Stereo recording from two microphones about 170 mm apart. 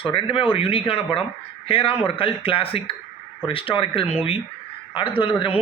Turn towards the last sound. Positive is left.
turn(degrees=30)  # may be behind; listen again after turning